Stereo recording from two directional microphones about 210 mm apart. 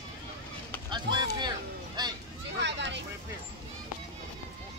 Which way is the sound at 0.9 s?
20° right (ahead or behind).